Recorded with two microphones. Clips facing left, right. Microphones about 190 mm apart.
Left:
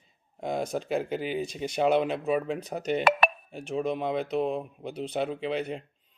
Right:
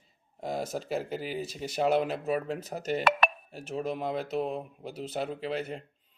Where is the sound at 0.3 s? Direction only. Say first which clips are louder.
Left 3 dB; 5° right (ahead or behind).